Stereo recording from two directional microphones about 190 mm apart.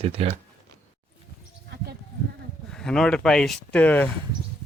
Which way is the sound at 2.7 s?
5° left (ahead or behind).